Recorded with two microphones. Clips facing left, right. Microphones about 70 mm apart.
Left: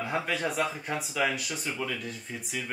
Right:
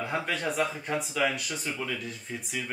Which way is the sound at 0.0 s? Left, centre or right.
Centre.